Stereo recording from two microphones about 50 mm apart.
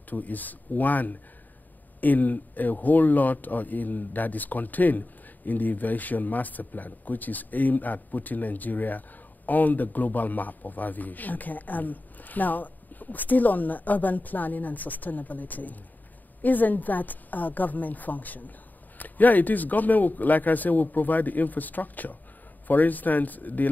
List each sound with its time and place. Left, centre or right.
0.1 s speech: left